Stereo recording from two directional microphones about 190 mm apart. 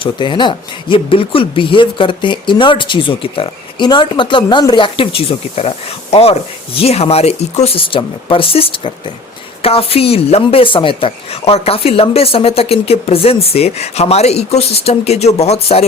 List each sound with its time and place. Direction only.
0.0 s a woman's voice: 25° left (ahead or behind)